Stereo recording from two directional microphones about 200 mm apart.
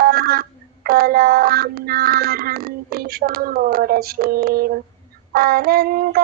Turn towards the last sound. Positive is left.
turn(degrees=-45)  # may be behind; listen again after turning